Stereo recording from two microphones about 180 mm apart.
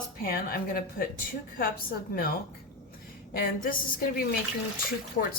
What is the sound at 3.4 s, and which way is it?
Speech, 55° left (ahead or behind).